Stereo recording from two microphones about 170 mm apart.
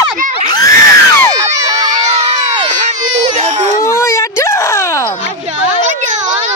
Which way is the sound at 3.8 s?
15° left (ahead or behind).